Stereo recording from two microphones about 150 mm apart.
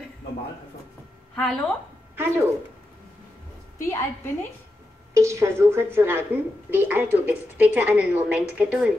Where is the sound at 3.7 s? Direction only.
20° left (ahead or behind).